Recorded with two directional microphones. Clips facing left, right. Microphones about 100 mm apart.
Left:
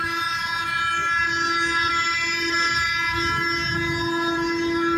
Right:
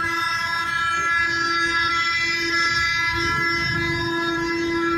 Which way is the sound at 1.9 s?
40° left (ahead or behind).